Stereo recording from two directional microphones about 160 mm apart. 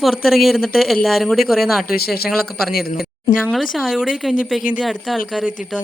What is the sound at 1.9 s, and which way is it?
Speech, 75° left (ahead or behind).